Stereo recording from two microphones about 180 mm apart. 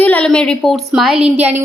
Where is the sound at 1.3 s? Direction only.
35° right (ahead or behind).